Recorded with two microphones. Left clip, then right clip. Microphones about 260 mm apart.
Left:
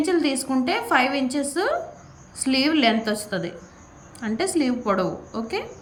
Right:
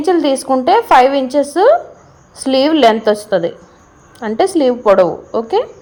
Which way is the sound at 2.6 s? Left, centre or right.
Right.